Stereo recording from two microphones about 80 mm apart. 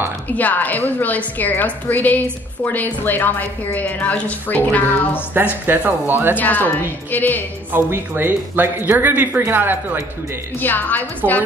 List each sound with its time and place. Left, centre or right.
0.3 s a woman's voice: centre
5.3 s speech: right
6.3 s a woman's voice: left
7.7 s speech: right
10.6 s a woman's voice: left